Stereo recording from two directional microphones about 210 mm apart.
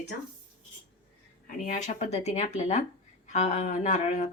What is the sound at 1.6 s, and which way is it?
Speech, 35° left (ahead or behind).